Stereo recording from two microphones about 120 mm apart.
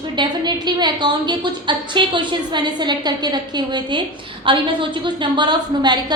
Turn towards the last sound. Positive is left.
turn(degrees=-35)  # may be behind; listen again after turning